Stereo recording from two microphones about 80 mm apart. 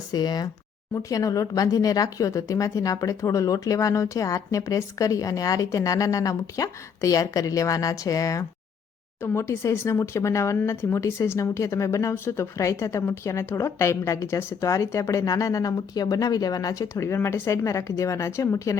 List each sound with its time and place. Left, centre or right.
0.1 s speech: left
0.9 s speech: left
9.2 s a woman's voice: left